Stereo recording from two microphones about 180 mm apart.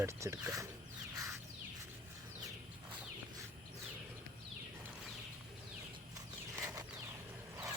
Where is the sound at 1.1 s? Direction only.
20° right (ahead or behind).